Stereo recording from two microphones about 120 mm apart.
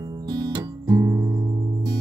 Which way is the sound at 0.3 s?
35° right (ahead or behind).